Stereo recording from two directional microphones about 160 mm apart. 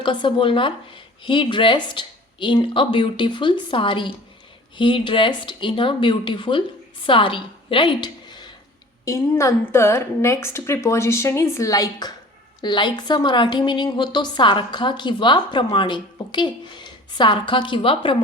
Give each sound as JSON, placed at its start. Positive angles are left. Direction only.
{"t": 0.0, "sound": "a woman's voice", "side_deg": 30}
{"t": 9.0, "sound": "a woman's voice", "side_deg": 20}